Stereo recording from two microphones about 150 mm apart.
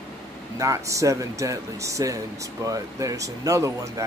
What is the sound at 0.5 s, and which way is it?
Speech, 20° right (ahead or behind).